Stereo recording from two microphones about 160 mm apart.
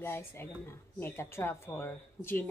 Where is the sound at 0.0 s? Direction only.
15° left (ahead or behind).